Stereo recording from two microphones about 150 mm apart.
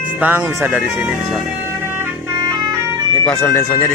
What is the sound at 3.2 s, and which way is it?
Speech, 5° left (ahead or behind).